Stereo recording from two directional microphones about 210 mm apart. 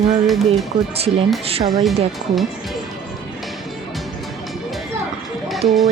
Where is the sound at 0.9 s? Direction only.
30° right (ahead or behind).